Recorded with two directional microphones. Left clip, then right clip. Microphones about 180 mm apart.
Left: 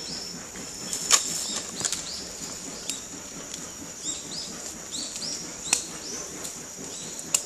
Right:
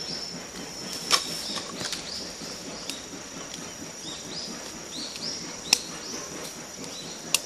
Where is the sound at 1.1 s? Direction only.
25° left (ahead or behind).